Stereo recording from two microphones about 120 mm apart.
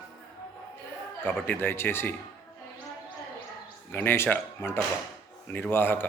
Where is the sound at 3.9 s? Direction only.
20° left (ahead or behind).